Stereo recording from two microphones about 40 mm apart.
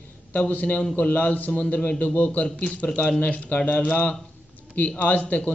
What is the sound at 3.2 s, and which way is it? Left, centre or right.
Speech, left.